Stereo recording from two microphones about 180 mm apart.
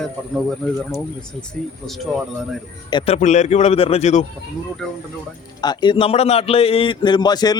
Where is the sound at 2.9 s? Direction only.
35° left (ahead or behind).